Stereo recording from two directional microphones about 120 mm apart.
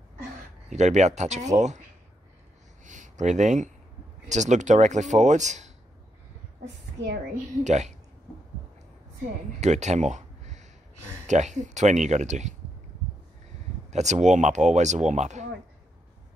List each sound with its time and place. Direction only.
0.7 s speech: 75° right (ahead or behind)
2.8 s a sound: 90° right
4.3 s speech: 80° right
7.6 s speech: 75° right (ahead or behind)
9.6 s speech: 75° right (ahead or behind)
13.8 s speech: 70° right (ahead or behind)